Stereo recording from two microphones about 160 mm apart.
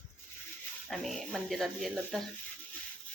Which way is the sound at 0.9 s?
Centre (ahead or behind).